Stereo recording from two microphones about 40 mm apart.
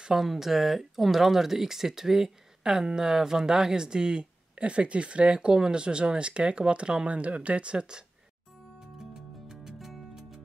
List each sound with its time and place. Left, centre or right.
0.1 s speech: centre; by 8.0 s right
9.5 s music: centre